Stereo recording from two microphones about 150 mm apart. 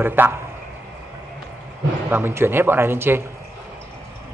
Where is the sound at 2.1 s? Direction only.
15° right (ahead or behind).